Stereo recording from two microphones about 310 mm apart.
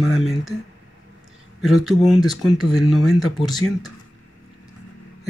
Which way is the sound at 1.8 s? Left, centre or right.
Centre.